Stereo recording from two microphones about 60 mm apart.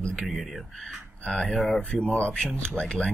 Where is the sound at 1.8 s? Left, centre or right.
Centre.